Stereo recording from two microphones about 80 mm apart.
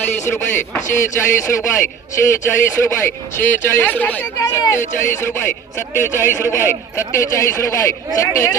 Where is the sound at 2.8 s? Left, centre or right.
Left.